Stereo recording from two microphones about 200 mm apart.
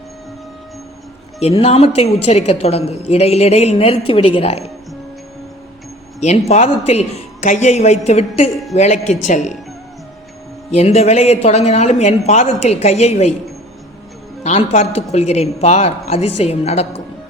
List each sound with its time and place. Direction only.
1.4 s a woman's voice: 30° left (ahead or behind)
6.1 s a woman's voice: 35° left (ahead or behind)
10.7 s a woman's voice: 30° left (ahead or behind)
14.4 s a woman's voice: 35° left (ahead or behind)